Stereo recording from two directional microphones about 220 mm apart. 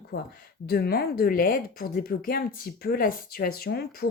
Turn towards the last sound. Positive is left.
turn(degrees=45)  # may be behind; listen again after turning